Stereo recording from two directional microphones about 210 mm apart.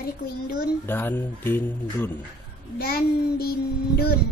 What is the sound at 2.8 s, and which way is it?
Child singing, 45° left (ahead or behind).